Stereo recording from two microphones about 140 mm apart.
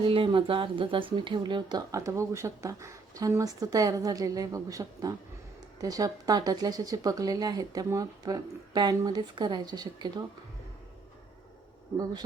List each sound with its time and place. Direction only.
0.0 s speech: 40° right (ahead or behind)